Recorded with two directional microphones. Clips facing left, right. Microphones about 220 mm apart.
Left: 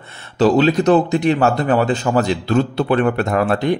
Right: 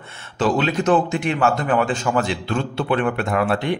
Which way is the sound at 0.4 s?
35° left (ahead or behind).